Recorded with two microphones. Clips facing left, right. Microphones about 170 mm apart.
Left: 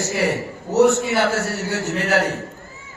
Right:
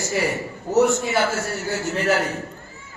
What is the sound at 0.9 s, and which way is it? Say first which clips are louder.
Speech: left 2 dB; 70° left (ahead or behind).